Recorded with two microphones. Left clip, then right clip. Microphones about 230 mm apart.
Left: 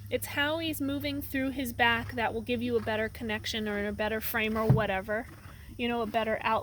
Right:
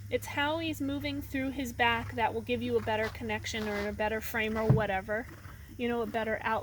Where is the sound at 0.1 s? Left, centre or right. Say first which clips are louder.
Left 1 dB; left.